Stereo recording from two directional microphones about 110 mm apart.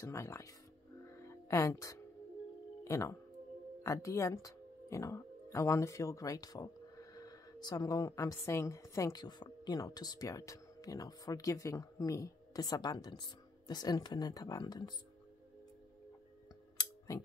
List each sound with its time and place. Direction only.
0.0 s speech: 25° left (ahead or behind)
1.1 s music: 25° left (ahead or behind)
2.8 s speech: 25° left (ahead or behind)